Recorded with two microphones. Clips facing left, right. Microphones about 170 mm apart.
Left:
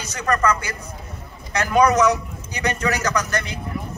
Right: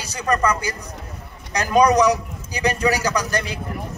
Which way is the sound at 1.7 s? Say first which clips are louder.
Right 1 dB; 15° right (ahead or behind).